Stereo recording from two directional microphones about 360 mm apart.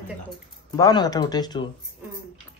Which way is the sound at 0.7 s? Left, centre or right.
Centre.